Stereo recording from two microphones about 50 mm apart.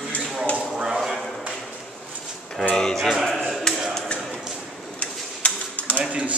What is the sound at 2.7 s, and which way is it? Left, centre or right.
Speech, centre.